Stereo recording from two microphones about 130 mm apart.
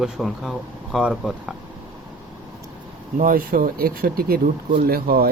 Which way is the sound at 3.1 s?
90° right.